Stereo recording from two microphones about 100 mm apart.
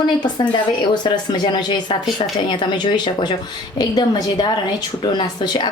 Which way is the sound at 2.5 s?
50° left (ahead or behind).